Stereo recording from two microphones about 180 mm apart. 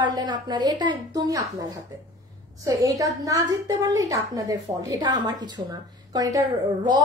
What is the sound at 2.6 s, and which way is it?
A woman's voice, 20° right (ahead or behind).